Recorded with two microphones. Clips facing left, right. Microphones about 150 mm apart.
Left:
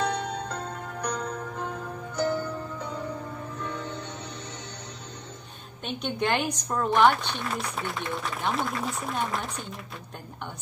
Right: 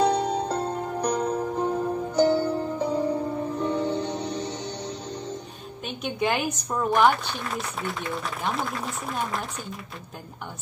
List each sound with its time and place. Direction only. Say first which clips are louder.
0.0 s music: right 7 dB; 35° right (ahead or behind)
5.9 s a woman's voice: right 1 dB; 5° right (ahead or behind)